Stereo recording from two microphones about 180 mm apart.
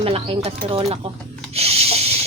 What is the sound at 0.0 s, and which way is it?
Speech, 35° right (ahead or behind).